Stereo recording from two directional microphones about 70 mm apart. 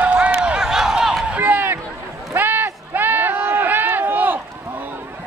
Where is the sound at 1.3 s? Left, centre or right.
Right.